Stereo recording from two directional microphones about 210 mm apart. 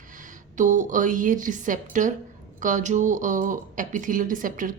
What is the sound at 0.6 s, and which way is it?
A woman's voice, 35° right (ahead or behind).